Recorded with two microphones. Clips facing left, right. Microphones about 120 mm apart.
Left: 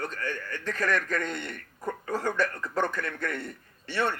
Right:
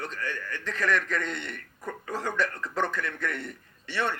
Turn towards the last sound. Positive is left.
turn(degrees=45)  # may be behind; listen again after turning